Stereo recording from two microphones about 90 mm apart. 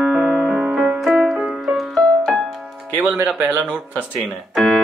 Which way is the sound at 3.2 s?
15° right (ahead or behind).